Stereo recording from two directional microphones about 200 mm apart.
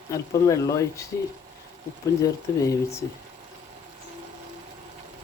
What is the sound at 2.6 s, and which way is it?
Speech, 15° left (ahead or behind).